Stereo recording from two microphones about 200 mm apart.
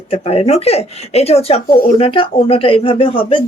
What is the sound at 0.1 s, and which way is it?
Speech, 30° left (ahead or behind).